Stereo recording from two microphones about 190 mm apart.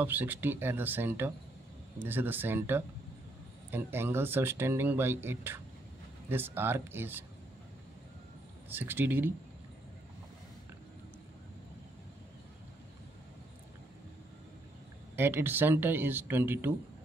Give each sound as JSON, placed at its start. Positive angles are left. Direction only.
{"t": 0.0, "sound": "speech", "side_deg": -10}
{"t": 8.6, "sound": "speech", "side_deg": -10}
{"t": 15.1, "sound": "speech", "side_deg": -10}